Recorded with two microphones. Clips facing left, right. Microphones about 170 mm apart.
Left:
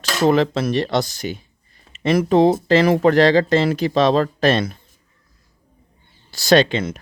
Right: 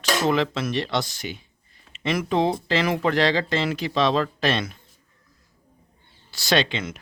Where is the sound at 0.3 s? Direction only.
40° left (ahead or behind).